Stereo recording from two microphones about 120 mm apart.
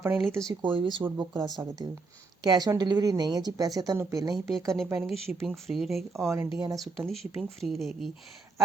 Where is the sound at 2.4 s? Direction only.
35° right (ahead or behind).